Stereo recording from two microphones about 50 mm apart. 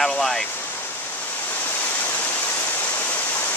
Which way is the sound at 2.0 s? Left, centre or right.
Left.